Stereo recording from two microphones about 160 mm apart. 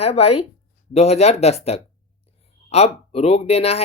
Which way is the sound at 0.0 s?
40° left (ahead or behind).